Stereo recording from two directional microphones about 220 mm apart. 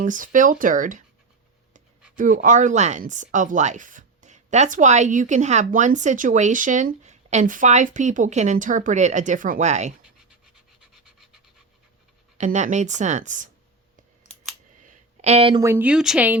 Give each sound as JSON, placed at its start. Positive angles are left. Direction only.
{"t": 0.0, "sound": "speech", "side_deg": -35}
{"t": 2.1, "sound": "speech", "side_deg": -35}
{"t": 10.8, "sound": "a sound", "side_deg": 0}
{"t": 12.4, "sound": "speech", "side_deg": -35}
{"t": 14.8, "sound": "a sound", "side_deg": -30}
{"t": 15.6, "sound": "speech", "side_deg": -10}